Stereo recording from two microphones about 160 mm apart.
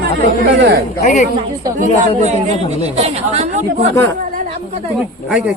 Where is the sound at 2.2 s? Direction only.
45° right (ahead or behind).